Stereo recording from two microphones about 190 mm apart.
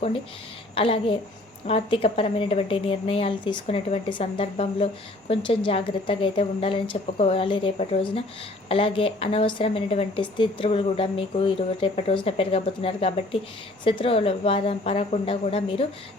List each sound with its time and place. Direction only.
0.8 s a woman's voice: 30° left (ahead or behind)